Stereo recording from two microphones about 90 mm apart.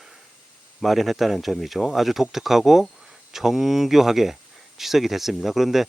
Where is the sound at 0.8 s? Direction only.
Centre (ahead or behind).